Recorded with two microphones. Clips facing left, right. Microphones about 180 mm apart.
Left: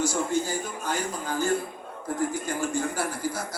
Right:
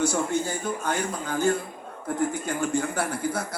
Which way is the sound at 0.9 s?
55° right (ahead or behind).